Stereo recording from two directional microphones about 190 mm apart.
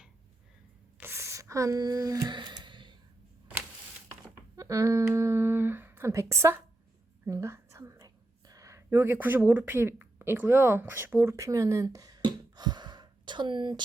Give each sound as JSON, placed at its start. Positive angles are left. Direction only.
{"t": 0.9, "sound": "a sound", "side_deg": -10}
{"t": 4.5, "sound": "speech", "side_deg": -15}
{"t": 7.3, "sound": "whispering", "side_deg": -15}